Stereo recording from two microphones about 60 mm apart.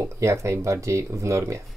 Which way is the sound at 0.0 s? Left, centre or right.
Right.